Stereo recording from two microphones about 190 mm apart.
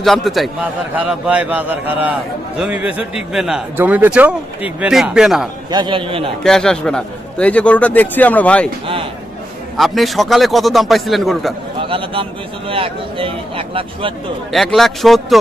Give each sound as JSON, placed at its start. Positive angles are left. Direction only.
{"t": 0.0, "sound": "a man's voice", "side_deg": 0}
{"t": 5.7, "sound": "a man's voice", "side_deg": -25}
{"t": 6.4, "sound": "a man's voice", "side_deg": 5}
{"t": 9.8, "sound": "a man's voice", "side_deg": 0}
{"t": 11.8, "sound": "a man's voice", "side_deg": -25}
{"t": 14.5, "sound": "a man's voice", "side_deg": 0}